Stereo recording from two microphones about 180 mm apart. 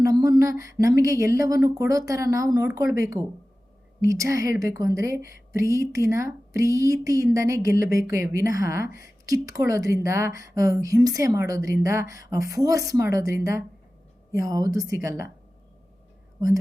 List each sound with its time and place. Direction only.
0.0 s a woman's voice: 20° right (ahead or behind)